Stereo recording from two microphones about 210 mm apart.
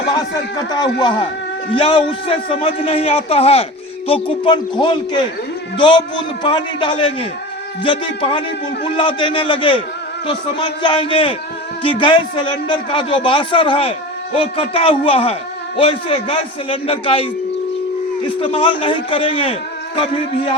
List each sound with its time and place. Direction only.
0.7 s a man's voice: 20° left (ahead or behind)
18.3 s a man's voice: 25° left (ahead or behind)